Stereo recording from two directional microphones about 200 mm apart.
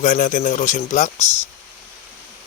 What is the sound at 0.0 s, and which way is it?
Speech, 40° left (ahead or behind).